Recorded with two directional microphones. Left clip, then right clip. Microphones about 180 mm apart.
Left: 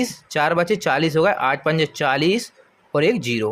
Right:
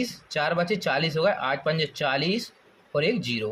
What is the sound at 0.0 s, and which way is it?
Speech, 40° left (ahead or behind).